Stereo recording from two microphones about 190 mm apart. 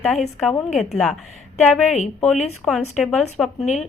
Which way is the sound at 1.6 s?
5° left (ahead or behind).